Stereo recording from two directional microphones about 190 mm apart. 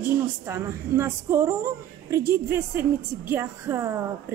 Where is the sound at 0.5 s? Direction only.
15° right (ahead or behind).